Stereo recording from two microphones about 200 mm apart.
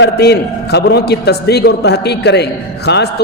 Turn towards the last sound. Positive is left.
turn(degrees=55)  # may be behind; listen again after turning